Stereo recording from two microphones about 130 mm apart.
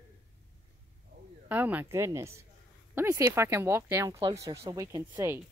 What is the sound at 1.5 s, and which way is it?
Speech, 10° right (ahead or behind).